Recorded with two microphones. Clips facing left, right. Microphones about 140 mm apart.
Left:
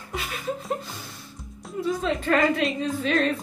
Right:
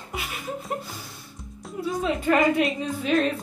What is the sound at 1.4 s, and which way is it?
Speech, 5° right (ahead or behind).